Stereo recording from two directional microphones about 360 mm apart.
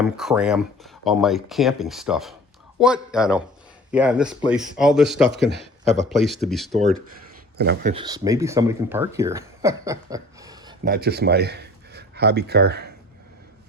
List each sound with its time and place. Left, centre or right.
0.0 s speech: centre
5.3 s speech: right
6.1 s speech: centre
7.6 s speech: right; by 10.8 s centre
10.8 s speech: right